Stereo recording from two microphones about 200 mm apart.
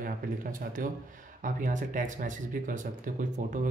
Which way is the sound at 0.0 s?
40° right (ahead or behind).